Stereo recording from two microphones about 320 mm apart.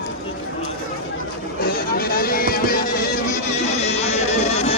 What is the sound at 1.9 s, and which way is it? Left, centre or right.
Music, left.